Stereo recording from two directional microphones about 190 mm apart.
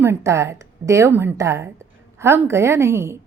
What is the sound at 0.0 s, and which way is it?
A woman's voice, 15° right (ahead or behind).